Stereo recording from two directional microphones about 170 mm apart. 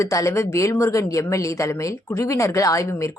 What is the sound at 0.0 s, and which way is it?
A woman's voice, 20° left (ahead or behind).